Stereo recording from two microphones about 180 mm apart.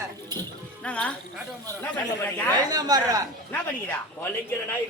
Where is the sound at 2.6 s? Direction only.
20° right (ahead or behind).